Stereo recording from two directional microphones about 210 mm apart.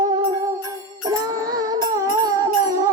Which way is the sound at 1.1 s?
15° right (ahead or behind).